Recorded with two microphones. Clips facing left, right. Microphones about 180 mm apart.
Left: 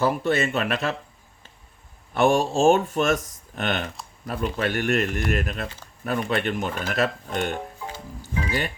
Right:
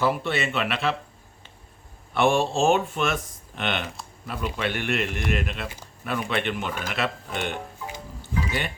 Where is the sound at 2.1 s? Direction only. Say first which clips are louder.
Left 2 dB; 40° left (ahead or behind).